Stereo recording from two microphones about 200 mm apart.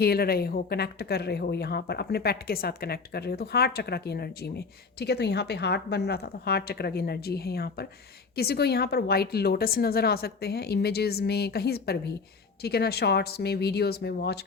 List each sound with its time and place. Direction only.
0.0 s speech: 50° left (ahead or behind)